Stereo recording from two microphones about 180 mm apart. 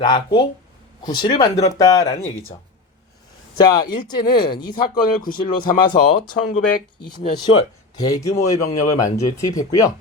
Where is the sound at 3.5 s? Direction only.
25° left (ahead or behind).